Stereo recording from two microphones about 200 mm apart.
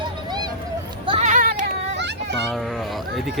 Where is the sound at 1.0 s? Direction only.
30° right (ahead or behind).